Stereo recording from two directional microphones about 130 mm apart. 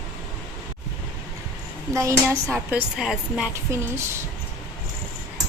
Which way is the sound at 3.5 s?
20° right (ahead or behind).